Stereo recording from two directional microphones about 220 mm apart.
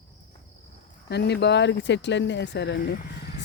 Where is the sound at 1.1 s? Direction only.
50° left (ahead or behind).